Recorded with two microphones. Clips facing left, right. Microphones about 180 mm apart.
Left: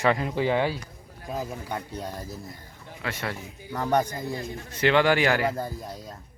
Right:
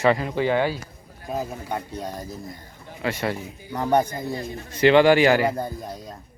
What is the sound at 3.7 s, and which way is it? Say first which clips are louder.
Speech: right 3 dB; 20° right (ahead or behind).